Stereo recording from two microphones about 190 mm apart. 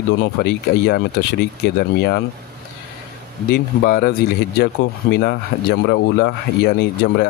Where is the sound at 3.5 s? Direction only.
55° left (ahead or behind).